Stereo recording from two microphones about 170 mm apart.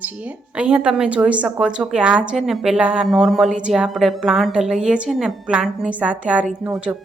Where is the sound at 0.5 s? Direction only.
5° right (ahead or behind).